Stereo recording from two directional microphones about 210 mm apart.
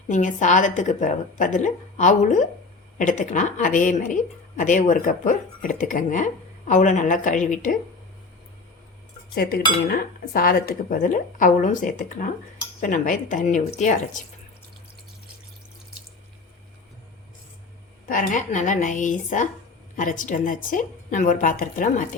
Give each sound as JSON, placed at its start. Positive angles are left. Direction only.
{"t": 0.1, "sound": "a woman's voice", "side_deg": 35}
{"t": 9.3, "sound": "cutlery", "side_deg": 45}
{"t": 9.8, "sound": "a woman's voice", "side_deg": 45}
{"t": 18.1, "sound": "a woman's voice", "side_deg": 40}